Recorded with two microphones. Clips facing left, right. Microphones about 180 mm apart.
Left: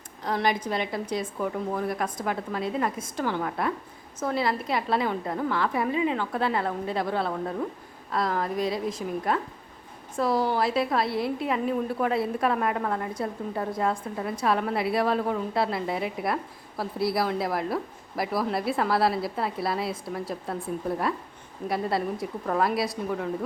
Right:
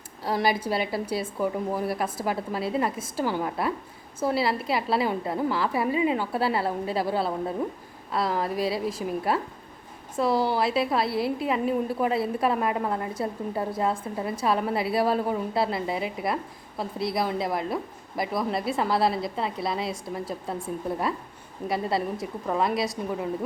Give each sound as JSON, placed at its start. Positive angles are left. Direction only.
{"t": 0.3, "sound": "a woman's voice", "side_deg": -5}
{"t": 21.7, "sound": "a woman's voice", "side_deg": 0}